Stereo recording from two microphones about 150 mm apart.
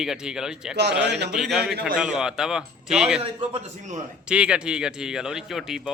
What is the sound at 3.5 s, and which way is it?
Speech, 50° right (ahead or behind).